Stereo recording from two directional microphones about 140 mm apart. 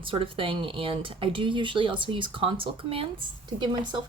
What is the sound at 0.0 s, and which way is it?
Speech, 40° right (ahead or behind).